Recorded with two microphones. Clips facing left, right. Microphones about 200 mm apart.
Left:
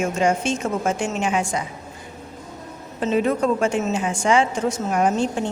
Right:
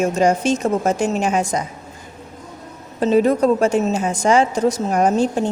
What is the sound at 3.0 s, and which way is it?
A woman's voice, 40° right (ahead or behind).